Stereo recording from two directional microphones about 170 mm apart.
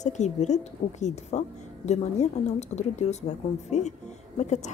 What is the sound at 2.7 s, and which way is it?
Speech, 40° left (ahead or behind).